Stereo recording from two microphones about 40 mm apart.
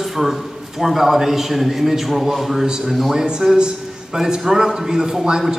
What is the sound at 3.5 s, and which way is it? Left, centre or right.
A man's voice, centre.